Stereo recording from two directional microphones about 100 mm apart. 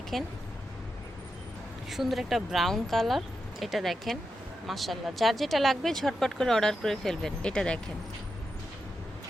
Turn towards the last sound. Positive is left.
turn(degrees=10)  # may be behind; listen again after turning